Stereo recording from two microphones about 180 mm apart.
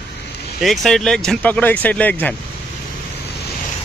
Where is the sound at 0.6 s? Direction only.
Centre (ahead or behind).